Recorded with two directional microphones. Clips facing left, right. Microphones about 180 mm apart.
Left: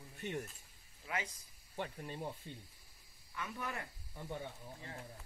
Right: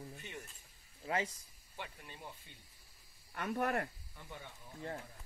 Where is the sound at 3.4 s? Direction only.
60° right (ahead or behind).